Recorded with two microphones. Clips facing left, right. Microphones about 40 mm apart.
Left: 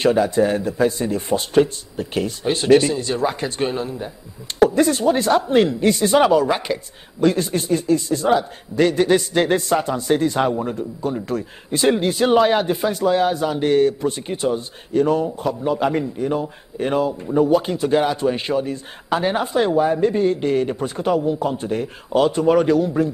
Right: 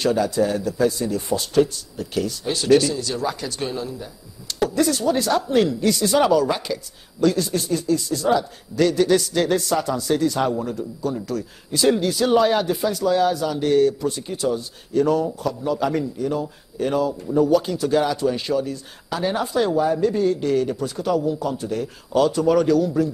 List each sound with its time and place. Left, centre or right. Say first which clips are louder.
0.0 s a man's voice: left 3 dB; left